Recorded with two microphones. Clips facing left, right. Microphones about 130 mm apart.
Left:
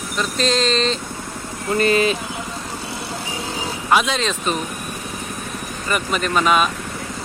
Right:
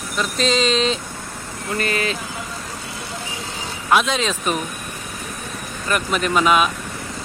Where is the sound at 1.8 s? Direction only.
25° left (ahead or behind).